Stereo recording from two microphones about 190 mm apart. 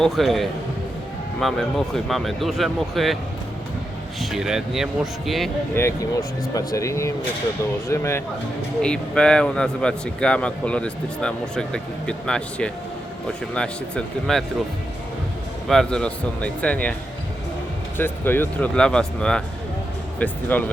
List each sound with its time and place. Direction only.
0.0 s speech: centre (ahead or behind)
4.2 s speech: centre (ahead or behind)
5.7 s speech: 15° left (ahead or behind)
15.6 s speech: centre (ahead or behind)
17.9 s speech: 10° left (ahead or behind)